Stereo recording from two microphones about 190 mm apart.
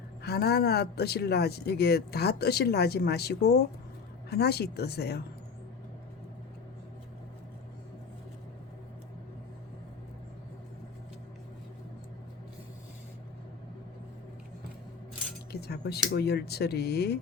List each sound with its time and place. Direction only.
0.2 s speech: 55° left (ahead or behind)
15.6 s speech: 60° left (ahead or behind)